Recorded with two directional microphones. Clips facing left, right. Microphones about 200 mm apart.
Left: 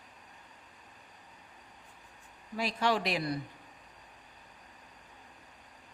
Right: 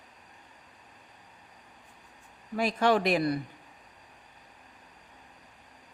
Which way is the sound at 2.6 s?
55° right (ahead or behind).